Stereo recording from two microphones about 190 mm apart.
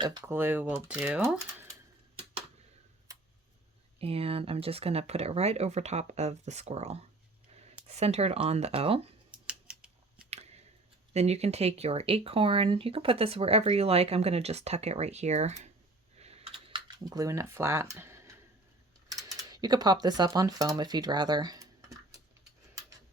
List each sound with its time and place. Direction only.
0.0 s speech: 20° right (ahead or behind)
4.0 s speech: 30° right (ahead or behind)
9.5 s scissors: 5° right (ahead or behind)
10.2 s a sound: 35° right (ahead or behind)
11.1 s speech: 35° right (ahead or behind)
16.1 s typing: 35° right (ahead or behind); by 18.2 s 15° right (ahead or behind)
19.4 s speech: 20° right (ahead or behind)